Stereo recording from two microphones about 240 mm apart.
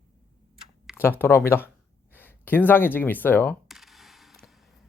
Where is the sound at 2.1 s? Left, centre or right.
Centre.